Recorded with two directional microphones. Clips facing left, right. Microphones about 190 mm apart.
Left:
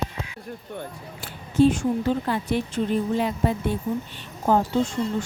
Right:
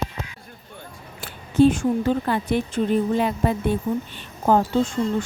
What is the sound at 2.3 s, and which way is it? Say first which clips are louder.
Speech: right 2 dB; 60° right (ahead or behind).